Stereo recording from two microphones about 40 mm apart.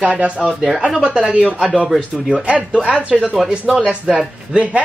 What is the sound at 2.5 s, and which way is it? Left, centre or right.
A woman's voice, right.